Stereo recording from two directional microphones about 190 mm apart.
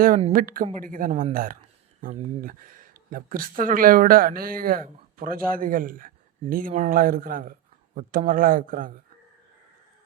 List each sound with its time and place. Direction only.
0.3 s speech: 45° right (ahead or behind)
2.0 s speech: 40° right (ahead or behind)